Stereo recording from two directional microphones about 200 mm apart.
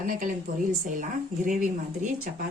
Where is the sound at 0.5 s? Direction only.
50° right (ahead or behind).